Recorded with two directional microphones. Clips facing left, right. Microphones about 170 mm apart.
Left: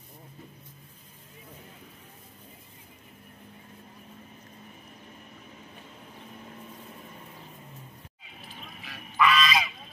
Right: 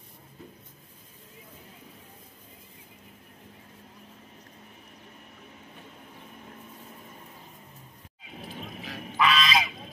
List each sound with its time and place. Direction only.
8.4 s vehicle: 40° right (ahead or behind)
9.1 s goose: 25° right (ahead or behind)